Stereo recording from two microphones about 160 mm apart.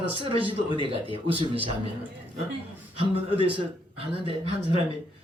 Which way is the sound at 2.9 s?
35° right (ahead or behind).